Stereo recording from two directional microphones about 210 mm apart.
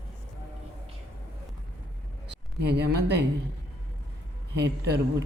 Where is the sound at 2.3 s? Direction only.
50° right (ahead or behind).